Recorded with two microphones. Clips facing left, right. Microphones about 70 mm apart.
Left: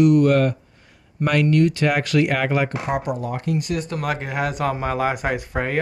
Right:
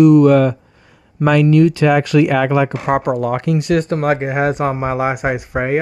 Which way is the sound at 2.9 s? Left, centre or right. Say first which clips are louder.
Right 11 dB; right.